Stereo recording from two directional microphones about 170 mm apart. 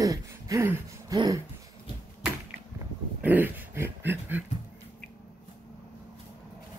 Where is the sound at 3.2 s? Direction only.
10° right (ahead or behind).